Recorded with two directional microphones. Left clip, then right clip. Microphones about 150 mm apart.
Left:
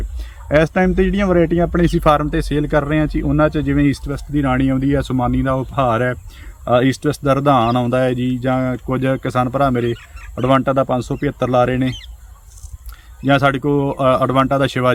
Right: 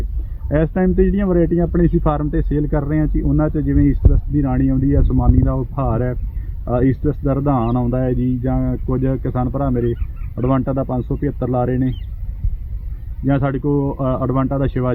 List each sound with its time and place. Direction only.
0.4 s speech: 30° left (ahead or behind)
4.1 s speech: 25° left (ahead or behind)
5.1 s speech: 40° left (ahead or behind)
13.2 s speech: 35° left (ahead or behind)